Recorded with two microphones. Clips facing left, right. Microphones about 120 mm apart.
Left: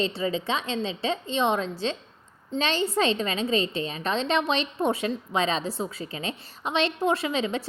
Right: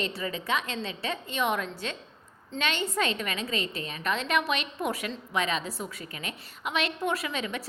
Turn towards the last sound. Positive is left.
turn(degrees=25)  # may be behind; listen again after turning